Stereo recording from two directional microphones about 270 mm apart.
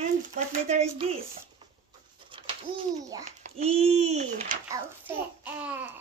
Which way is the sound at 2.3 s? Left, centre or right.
Centre.